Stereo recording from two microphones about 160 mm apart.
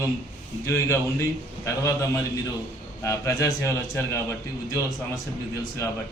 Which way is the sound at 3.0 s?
20° left (ahead or behind).